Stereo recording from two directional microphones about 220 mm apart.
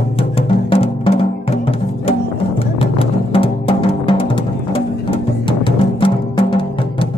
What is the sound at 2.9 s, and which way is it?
Music, 25° left (ahead or behind).